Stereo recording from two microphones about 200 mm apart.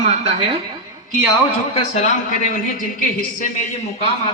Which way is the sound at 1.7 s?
35° left (ahead or behind).